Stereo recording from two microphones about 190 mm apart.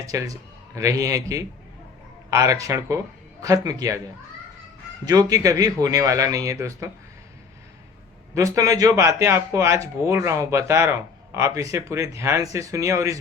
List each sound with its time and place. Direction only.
0.0 s speech: 15° right (ahead or behind)
5.0 s a man's voice: 20° right (ahead or behind)
8.4 s speech: 15° right (ahead or behind)